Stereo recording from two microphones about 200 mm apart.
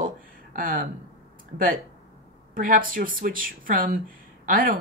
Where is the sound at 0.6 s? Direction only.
45° right (ahead or behind).